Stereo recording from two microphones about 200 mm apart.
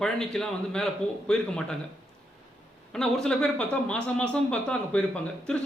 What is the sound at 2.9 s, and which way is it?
Speech, 5° left (ahead or behind).